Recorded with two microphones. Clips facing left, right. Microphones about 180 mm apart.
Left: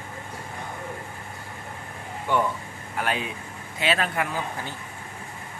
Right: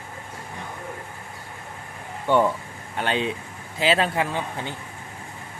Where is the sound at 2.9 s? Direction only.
25° right (ahead or behind).